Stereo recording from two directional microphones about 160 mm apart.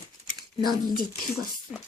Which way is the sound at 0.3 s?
25° right (ahead or behind).